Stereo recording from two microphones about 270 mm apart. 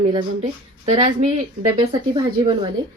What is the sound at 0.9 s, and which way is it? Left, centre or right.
A woman's voice, right.